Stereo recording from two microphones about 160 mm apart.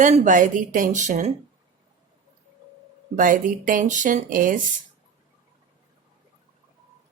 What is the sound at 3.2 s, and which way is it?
Speech, 55° right (ahead or behind).